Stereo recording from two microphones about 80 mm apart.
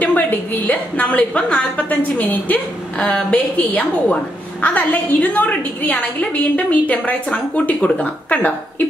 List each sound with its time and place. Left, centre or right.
0.0 s a woman's voice: left
3.0 s a woman's voice: centre
3.3 s a woman's voice: left